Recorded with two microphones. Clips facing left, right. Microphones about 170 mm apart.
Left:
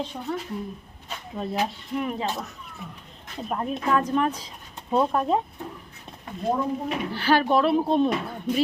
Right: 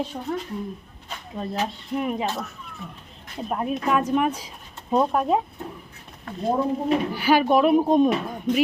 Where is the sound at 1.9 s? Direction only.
20° right (ahead or behind).